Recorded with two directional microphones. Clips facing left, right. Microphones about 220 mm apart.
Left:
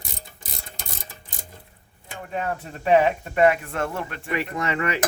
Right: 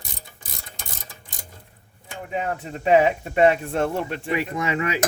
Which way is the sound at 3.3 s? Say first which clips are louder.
Right 2 dB; 25° right (ahead or behind).